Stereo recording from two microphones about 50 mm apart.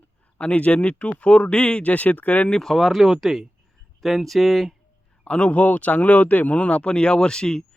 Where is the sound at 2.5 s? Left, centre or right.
Centre.